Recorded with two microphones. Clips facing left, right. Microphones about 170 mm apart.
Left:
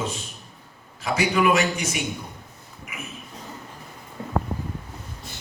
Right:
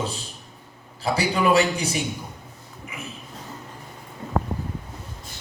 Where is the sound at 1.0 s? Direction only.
35° right (ahead or behind).